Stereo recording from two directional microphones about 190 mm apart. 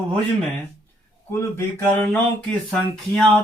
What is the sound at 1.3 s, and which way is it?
Speech, 15° left (ahead or behind).